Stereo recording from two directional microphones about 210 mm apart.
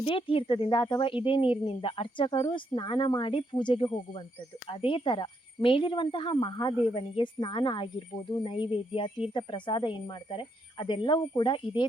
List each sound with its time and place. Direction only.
0.0 s speech: 25° left (ahead or behind)